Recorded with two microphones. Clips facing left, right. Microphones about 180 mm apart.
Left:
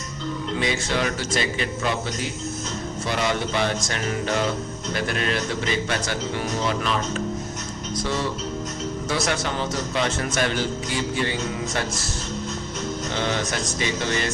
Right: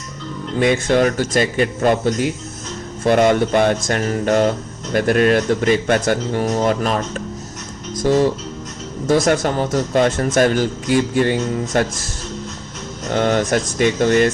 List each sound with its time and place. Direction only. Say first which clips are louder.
0.6 s speech: right 11 dB; 55° right (ahead or behind)
13.1 s speech: right 11 dB; 50° right (ahead or behind)